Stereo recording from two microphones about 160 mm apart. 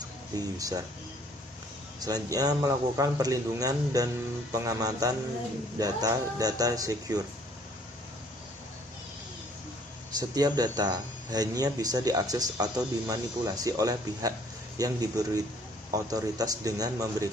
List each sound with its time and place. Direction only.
0.3 s speech: 20° right (ahead or behind)
2.0 s speech: 25° right (ahead or behind)
10.2 s speech: 25° right (ahead or behind)